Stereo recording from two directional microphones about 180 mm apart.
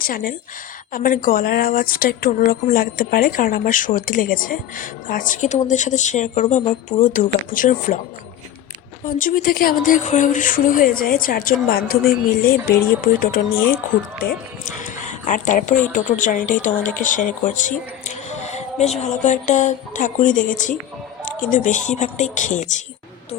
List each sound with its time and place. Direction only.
0.0 s speech: 50° left (ahead or behind)
9.0 s speech: 50° left (ahead or behind)
14.8 s a sound: 45° left (ahead or behind)
15.9 s speech: 45° left (ahead or behind)